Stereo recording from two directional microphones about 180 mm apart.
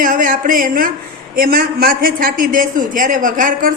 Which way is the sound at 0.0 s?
50° right (ahead or behind).